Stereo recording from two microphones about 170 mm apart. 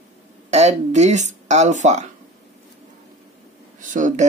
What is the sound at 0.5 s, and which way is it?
Speech, 40° right (ahead or behind).